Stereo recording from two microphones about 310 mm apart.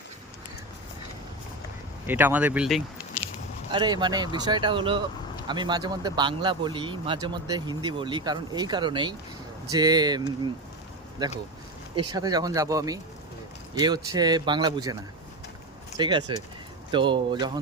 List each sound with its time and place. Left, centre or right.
2.0 s speech: centre
3.7 s speech: centre
11.9 s speech: centre
16.0 s speech: centre